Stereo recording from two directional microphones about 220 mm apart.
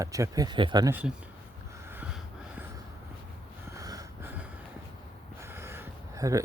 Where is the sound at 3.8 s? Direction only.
15° right (ahead or behind).